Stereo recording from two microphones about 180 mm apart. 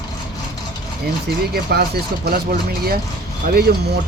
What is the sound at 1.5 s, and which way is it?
Speech, 60° right (ahead or behind).